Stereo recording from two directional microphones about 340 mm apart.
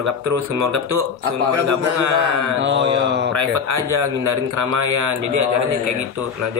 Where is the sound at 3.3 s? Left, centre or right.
Right.